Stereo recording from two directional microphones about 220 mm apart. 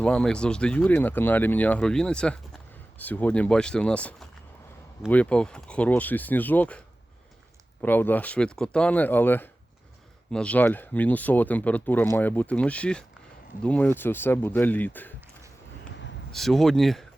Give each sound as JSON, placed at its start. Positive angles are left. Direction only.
{"t": 0.0, "sound": "speech", "side_deg": 5}
{"t": 15.9, "sound": "a sound", "side_deg": 55}
{"t": 16.3, "sound": "speech", "side_deg": 0}